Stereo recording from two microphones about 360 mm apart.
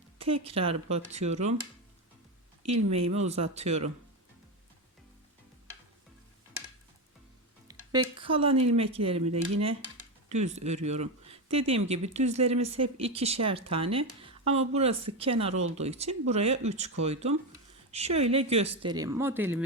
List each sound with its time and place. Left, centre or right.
0.2 s speech: centre
2.6 s speech: centre
7.7 s a sound: centre
8.6 s speech: centre